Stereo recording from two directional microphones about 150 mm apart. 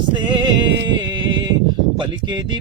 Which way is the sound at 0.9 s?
30° right (ahead or behind).